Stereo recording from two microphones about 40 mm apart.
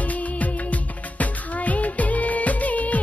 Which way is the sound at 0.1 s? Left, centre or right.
Left.